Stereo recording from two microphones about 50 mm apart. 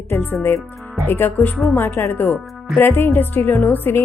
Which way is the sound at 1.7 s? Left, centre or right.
Left.